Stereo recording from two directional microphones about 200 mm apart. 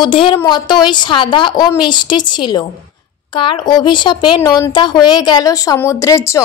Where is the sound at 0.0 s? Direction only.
25° left (ahead or behind).